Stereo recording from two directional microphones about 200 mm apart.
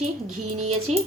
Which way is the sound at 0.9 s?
35° right (ahead or behind).